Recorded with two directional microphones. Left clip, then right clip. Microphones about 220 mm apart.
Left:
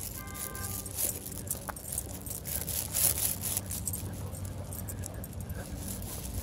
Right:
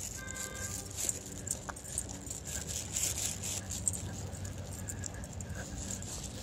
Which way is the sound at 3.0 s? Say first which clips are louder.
Left 2 dB; 40° left (ahead or behind).